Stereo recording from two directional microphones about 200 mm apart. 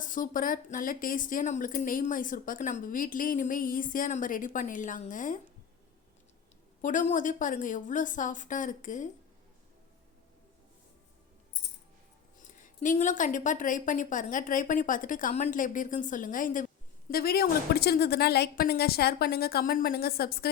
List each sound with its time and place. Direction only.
0.0 s speech: 40° left (ahead or behind)
6.8 s a woman's voice: 40° left (ahead or behind)
12.4 s a woman's voice: 40° left (ahead or behind)